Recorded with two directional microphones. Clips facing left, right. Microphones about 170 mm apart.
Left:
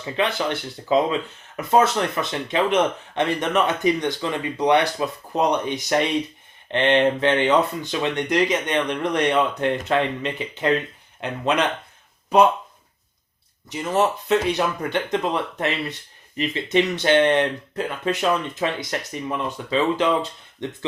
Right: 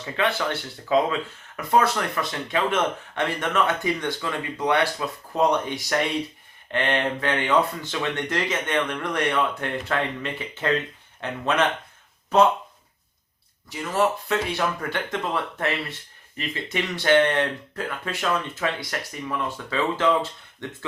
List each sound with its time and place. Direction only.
0.0 s speech: 20° left (ahead or behind)
13.7 s speech: 20° left (ahead or behind)